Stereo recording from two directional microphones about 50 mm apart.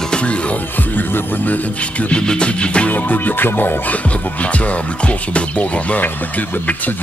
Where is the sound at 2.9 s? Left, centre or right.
Left.